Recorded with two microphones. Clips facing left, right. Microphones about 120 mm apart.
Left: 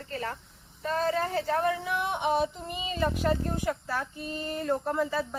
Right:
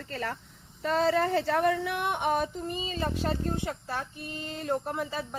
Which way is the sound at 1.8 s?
60° right (ahead or behind).